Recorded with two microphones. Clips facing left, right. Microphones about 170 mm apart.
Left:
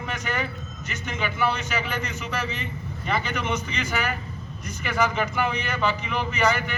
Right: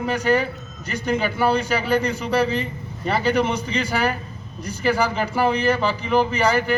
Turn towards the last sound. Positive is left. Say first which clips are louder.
# right 4 dB
turn(degrees=-35)  # may be behind; listen again after turning